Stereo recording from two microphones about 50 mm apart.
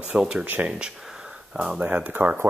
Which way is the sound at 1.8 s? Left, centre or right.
Right.